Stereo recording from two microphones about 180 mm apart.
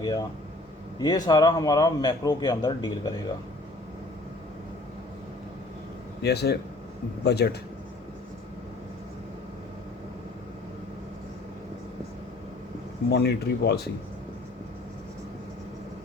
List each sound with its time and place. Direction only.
0.0 s a man's voice: 20° left (ahead or behind)
6.2 s speech: 65° left (ahead or behind)
13.1 s speech: 65° left (ahead or behind)